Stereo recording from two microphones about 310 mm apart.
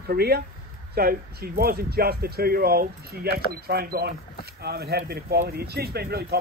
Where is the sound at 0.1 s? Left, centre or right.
Right.